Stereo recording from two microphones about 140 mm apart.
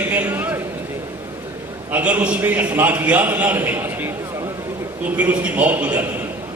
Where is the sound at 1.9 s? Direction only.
10° right (ahead or behind).